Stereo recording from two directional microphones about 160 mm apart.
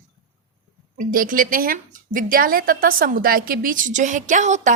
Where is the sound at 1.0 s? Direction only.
60° right (ahead or behind).